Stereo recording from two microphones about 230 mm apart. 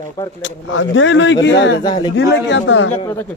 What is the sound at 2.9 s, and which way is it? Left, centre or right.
Speech, centre.